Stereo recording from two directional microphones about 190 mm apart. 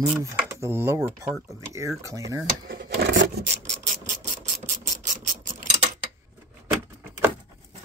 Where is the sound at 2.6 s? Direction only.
60° right (ahead or behind).